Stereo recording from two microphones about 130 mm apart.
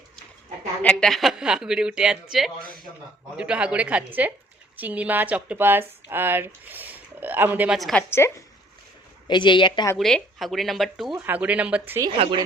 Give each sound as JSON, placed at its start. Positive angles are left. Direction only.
{"t": 0.8, "sound": "a woman's voice", "side_deg": 5}
{"t": 7.8, "sound": "a woman's voice", "side_deg": 0}
{"t": 8.1, "sound": "speech", "side_deg": 20}
{"t": 9.2, "sound": "speech", "side_deg": 35}
{"t": 10.0, "sound": "a woman's voice", "side_deg": 5}
{"t": 11.3, "sound": "speech", "side_deg": -10}
{"t": 12.1, "sound": "a woman's voice", "side_deg": -50}